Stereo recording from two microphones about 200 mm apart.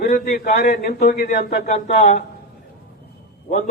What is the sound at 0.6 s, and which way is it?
A man's voice, 45° left (ahead or behind).